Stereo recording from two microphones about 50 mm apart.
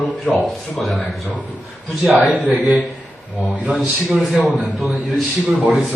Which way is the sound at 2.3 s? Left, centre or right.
Right.